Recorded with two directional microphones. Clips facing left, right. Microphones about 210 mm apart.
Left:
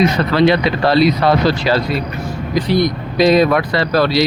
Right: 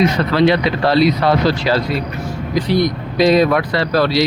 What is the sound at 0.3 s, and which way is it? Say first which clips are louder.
Speech: left 1 dB; 65° left (ahead or behind).